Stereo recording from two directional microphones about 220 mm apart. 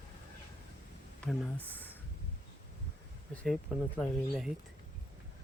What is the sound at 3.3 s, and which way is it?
Speech, 5° left (ahead or behind).